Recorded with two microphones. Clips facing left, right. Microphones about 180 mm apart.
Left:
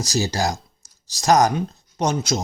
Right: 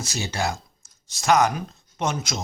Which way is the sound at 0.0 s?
35° left (ahead or behind).